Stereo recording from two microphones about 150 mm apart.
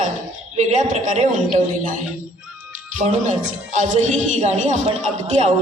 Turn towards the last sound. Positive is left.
turn(degrees=-45)  # may be behind; listen again after turning